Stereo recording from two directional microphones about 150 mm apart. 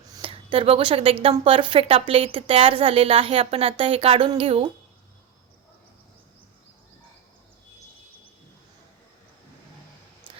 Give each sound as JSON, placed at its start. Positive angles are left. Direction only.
{"t": 0.2, "sound": "speech", "side_deg": -35}